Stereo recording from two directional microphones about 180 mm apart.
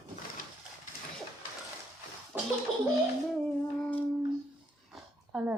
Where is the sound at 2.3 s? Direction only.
10° right (ahead or behind).